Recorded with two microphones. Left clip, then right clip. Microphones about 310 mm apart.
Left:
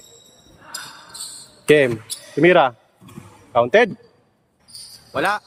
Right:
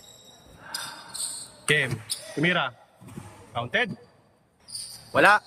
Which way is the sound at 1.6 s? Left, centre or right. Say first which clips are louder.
Left 9 dB; centre.